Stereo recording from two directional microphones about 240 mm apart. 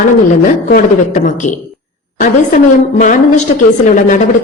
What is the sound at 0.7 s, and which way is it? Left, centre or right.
Speech, left.